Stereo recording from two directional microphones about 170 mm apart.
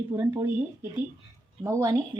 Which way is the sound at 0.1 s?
25° right (ahead or behind).